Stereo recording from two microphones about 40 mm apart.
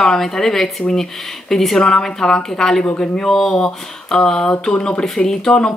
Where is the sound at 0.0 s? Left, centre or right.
Centre.